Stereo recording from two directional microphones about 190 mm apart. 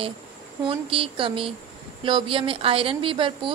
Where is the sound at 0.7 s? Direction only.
30° right (ahead or behind).